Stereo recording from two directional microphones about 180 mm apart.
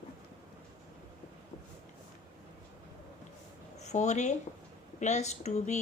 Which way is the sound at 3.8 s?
40° left (ahead or behind).